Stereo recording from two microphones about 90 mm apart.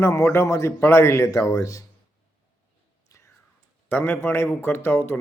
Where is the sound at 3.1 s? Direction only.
35° left (ahead or behind).